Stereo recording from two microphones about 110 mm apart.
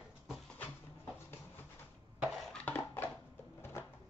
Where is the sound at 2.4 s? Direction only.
10° left (ahead or behind).